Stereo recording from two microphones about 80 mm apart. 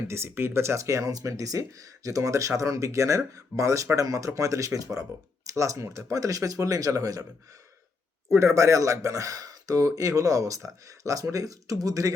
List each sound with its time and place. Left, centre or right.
0.1 s speech: right
8.3 s speech: right